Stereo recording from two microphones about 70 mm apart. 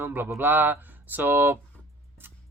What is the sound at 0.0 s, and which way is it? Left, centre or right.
Speech, right.